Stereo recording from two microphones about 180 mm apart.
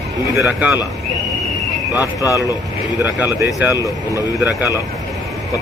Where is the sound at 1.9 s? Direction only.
20° left (ahead or behind).